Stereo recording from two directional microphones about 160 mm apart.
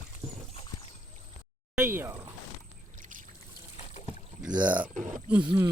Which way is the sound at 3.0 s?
55° right (ahead or behind).